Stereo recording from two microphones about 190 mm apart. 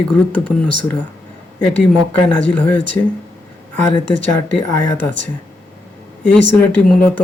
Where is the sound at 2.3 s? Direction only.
5° left (ahead or behind).